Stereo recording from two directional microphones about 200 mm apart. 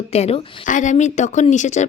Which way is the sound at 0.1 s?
30° left (ahead or behind).